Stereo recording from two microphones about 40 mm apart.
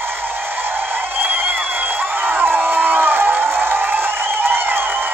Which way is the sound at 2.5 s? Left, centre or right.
Right.